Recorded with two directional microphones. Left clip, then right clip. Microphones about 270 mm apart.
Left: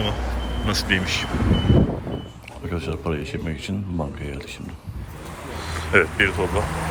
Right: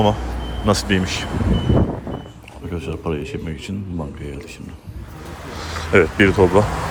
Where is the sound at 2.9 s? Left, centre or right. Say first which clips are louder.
Right 4 dB; centre.